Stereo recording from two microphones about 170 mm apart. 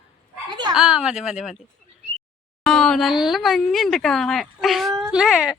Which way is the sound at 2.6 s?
5° left (ahead or behind).